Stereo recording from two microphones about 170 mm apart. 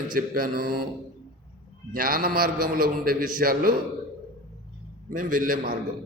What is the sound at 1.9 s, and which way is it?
Mantra, 55° right (ahead or behind).